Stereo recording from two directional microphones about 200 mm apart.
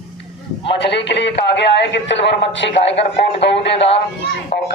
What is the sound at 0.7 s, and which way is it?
A man's voice, 60° left (ahead or behind).